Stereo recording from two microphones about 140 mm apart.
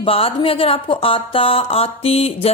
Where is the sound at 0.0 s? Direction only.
40° left (ahead or behind).